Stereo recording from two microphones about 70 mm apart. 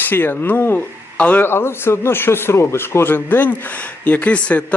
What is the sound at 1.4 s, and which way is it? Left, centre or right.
Speech, left.